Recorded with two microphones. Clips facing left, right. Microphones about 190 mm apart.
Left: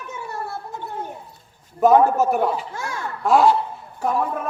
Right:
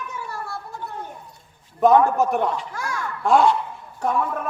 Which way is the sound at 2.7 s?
25° left (ahead or behind).